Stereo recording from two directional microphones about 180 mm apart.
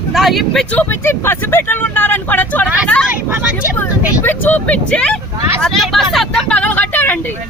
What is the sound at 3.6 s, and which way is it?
Speech, 10° left (ahead or behind).